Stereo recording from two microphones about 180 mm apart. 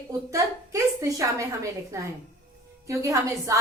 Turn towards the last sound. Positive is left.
turn(degrees=-15)  # may be behind; listen again after turning